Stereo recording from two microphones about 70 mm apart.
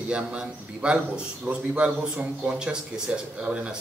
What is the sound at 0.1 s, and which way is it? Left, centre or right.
A man's voice, centre.